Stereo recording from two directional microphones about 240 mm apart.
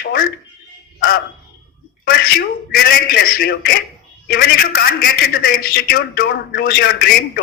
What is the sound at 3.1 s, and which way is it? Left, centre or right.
A man's voice, left.